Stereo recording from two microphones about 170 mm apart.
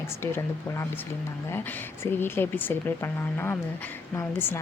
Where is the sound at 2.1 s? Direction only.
15° left (ahead or behind).